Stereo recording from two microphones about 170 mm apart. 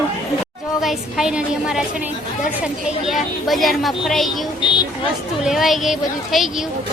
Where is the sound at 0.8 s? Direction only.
Centre (ahead or behind).